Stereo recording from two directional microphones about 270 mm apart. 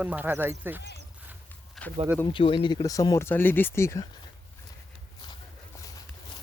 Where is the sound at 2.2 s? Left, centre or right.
Centre.